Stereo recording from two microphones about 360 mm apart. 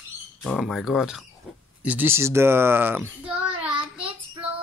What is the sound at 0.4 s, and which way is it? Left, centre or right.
Speech, centre.